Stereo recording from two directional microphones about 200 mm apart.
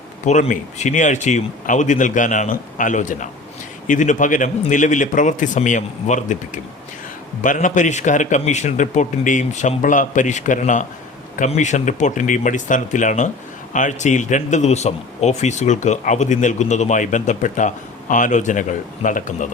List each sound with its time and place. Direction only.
0.3 s speech: 40° left (ahead or behind)